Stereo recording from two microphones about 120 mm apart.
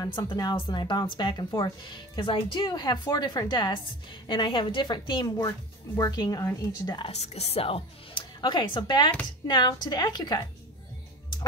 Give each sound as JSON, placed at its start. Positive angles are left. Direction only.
{"t": 0.0, "sound": "speech", "side_deg": 35}
{"t": 7.1, "sound": "speech", "side_deg": 60}